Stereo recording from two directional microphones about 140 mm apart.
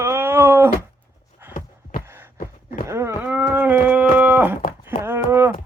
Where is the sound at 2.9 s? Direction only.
15° right (ahead or behind).